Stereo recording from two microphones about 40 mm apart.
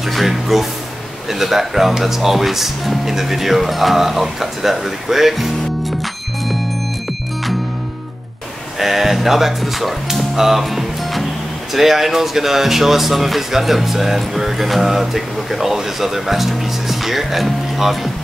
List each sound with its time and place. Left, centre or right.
0.1 s speech: centre
8.7 s speech: centre
10.1 s music: centre
11.7 s speech: centre